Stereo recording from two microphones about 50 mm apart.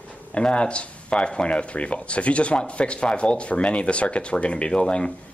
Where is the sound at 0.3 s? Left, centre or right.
Left.